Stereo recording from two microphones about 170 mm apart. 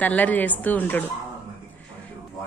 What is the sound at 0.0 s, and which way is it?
A woman's voice, 10° left (ahead or behind).